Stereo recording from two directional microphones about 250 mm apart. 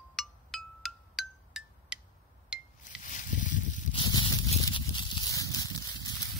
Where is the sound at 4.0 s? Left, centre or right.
Centre.